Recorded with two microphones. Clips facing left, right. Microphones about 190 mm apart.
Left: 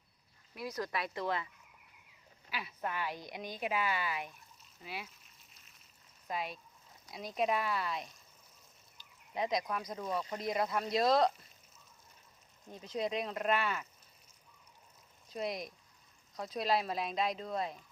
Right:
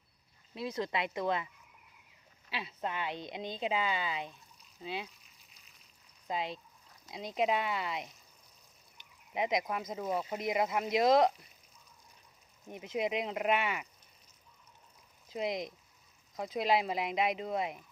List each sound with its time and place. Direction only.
0.5 s speech: 25° right (ahead or behind)
2.5 s speech: 25° right (ahead or behind)
5.2 s a sound: centre (ahead or behind)
6.2 s speech: 25° right (ahead or behind)
9.3 s speech: 20° right (ahead or behind)
12.6 s speech: 20° right (ahead or behind)
15.3 s speech: 20° right (ahead or behind)